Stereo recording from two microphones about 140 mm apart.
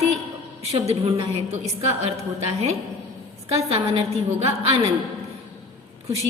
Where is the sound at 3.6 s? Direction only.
45° right (ahead or behind).